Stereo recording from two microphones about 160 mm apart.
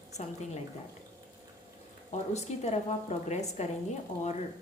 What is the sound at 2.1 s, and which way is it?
A woman's voice, 45° left (ahead or behind).